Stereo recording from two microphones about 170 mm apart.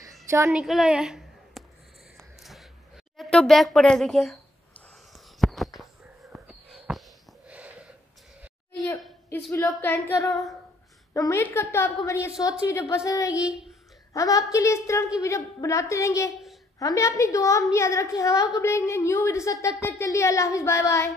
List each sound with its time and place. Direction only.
0.5 s a woman's voice: 5° right (ahead or behind)
2.1 s a sound: centre (ahead or behind)
3.2 s a woman's voice: 5° left (ahead or behind)
5.1 s a sound: centre (ahead or behind)
7.4 s wheeze: 10° right (ahead or behind)
9.3 s a woman's voice: 15° left (ahead or behind)
13.5 s a woman's voice: 5° right (ahead or behind)
14.1 s a woman's voice: 20° left (ahead or behind)